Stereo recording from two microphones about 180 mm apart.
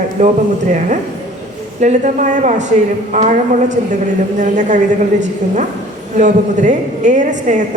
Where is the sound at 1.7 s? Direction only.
45° right (ahead or behind).